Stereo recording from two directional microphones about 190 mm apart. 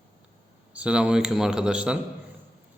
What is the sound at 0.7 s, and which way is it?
Speech, 5° right (ahead or behind).